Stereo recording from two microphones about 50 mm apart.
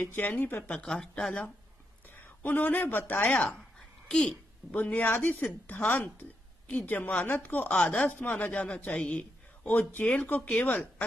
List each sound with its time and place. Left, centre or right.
0.0 s a man's voice: left
0.8 s speech: centre
2.0 s speech: left
3.3 s speech: left
4.1 s a child's voice: centre
4.7 s a man's voice: left
8.1 s a man's voice: left